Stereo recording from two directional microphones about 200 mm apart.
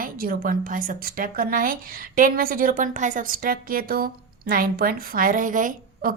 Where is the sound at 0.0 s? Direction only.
45° right (ahead or behind).